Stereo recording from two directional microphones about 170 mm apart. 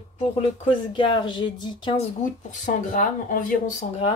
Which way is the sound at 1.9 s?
45° left (ahead or behind).